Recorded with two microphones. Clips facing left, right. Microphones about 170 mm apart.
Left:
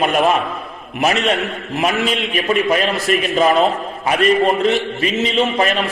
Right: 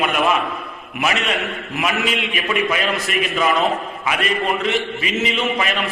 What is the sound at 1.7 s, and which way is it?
A man's voice, 35° left (ahead or behind).